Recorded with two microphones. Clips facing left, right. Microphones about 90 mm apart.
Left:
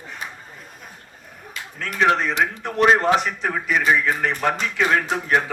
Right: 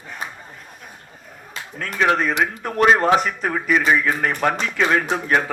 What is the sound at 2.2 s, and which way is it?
A man's voice, 45° right (ahead or behind).